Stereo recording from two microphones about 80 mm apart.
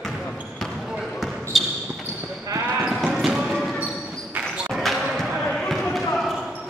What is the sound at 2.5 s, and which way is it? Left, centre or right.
Basketball bounce, right.